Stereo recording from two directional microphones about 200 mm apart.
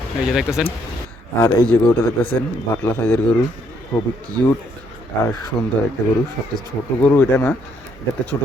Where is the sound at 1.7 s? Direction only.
10° left (ahead or behind).